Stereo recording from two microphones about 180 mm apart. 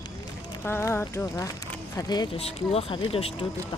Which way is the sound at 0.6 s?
10° left (ahead or behind).